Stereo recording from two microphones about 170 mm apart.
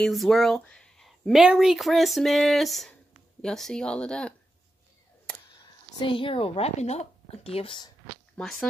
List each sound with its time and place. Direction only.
0.0 s speech: centre (ahead or behind)
5.3 s camera: 5° left (ahead or behind)
5.9 s speech: 30° left (ahead or behind)
8.4 s speech: centre (ahead or behind)